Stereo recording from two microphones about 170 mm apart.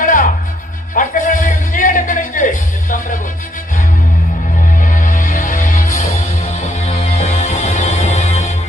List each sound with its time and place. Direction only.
0.0 s music: 50° left (ahead or behind)
4.8 s music: 50° left (ahead or behind)